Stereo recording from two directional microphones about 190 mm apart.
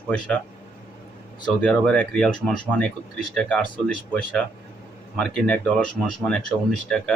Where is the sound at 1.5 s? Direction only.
5° left (ahead or behind).